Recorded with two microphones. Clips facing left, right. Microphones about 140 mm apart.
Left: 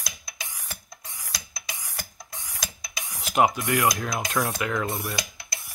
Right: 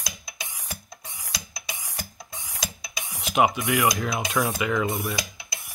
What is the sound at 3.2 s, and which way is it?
Speech, centre (ahead or behind).